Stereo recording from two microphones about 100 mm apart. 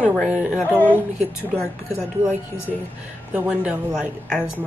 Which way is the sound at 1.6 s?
25° left (ahead or behind).